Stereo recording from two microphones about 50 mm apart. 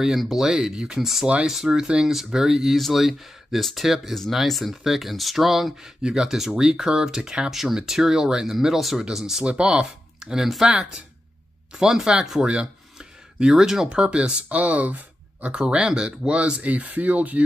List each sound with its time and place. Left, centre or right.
0.0 s speech: centre
9.4 s speech: right
10.2 s speech: centre; by 15.6 s right
15.6 s speech: centre